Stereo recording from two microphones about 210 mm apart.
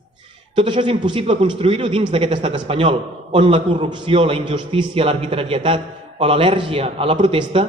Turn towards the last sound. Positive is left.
turn(degrees=-25)  # may be behind; listen again after turning